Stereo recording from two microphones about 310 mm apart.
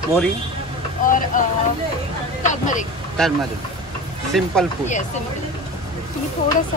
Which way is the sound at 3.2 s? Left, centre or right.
Centre.